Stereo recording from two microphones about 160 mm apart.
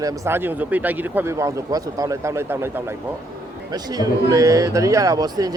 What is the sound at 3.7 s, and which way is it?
Speech, 25° right (ahead or behind).